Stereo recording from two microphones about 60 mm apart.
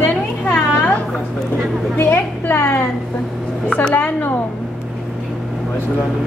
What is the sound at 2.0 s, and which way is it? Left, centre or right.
Speech, left.